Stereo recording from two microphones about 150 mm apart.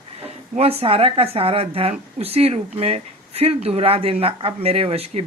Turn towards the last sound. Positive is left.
turn(degrees=-45)  # may be behind; listen again after turning